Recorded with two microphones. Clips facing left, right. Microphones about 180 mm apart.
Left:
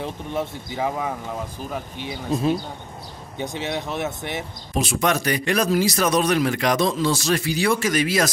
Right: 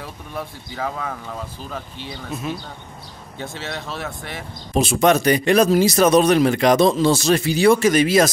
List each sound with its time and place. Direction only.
0.0 s speech: 25° left (ahead or behind)
3.3 s speech: 15° left (ahead or behind)
4.7 s speech: 25° right (ahead or behind)